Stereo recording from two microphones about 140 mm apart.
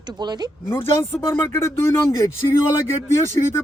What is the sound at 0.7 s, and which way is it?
Speech, 15° left (ahead or behind).